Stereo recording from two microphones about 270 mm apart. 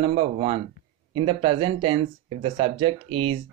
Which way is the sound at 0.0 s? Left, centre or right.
Centre.